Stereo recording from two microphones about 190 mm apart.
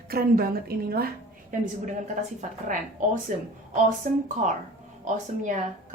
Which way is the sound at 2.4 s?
40° right (ahead or behind).